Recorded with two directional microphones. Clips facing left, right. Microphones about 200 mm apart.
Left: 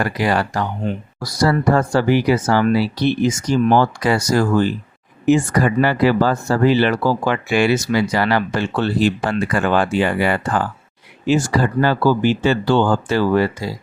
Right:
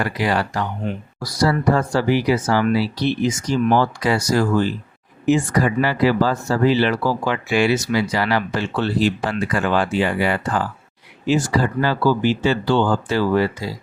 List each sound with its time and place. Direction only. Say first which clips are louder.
0.0 s speech: left 2 dB; 45° left (ahead or behind)